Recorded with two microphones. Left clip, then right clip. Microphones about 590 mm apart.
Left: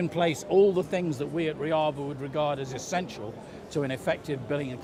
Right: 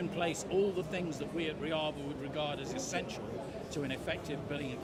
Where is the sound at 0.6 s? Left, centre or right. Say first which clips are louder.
Left 13 dB; left.